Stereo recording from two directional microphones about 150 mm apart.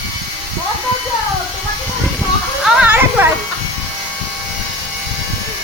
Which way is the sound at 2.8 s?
15° right (ahead or behind).